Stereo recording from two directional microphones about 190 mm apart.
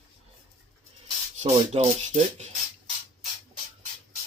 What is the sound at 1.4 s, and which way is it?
Speech, 35° right (ahead or behind).